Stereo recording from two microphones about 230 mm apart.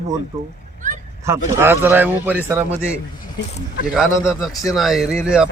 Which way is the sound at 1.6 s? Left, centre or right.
Centre.